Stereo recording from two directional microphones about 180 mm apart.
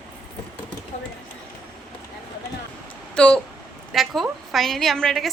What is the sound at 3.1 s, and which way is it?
Speech, 5° left (ahead or behind).